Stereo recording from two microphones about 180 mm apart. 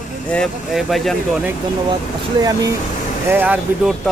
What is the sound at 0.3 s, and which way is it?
A man's voice, centre (ahead or behind).